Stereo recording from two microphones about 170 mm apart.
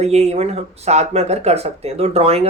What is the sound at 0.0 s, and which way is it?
Speech, 40° right (ahead or behind).